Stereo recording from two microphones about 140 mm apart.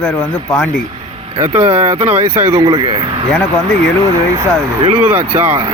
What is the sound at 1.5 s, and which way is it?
Speech, 50° right (ahead or behind).